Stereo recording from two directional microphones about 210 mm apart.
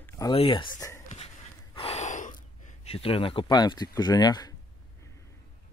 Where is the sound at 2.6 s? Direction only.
30° left (ahead or behind).